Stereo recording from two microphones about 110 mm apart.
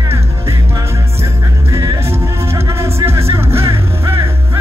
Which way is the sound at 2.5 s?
25° right (ahead or behind).